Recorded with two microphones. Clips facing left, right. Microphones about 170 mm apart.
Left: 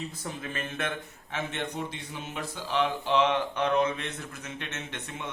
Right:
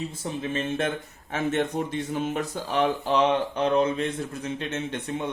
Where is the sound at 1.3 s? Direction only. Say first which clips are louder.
Right 8 dB; 45° right (ahead or behind).